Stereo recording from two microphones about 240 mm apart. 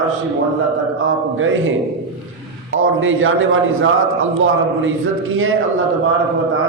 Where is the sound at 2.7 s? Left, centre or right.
Right.